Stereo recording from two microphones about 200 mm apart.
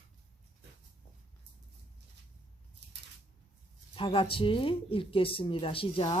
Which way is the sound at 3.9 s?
25° left (ahead or behind).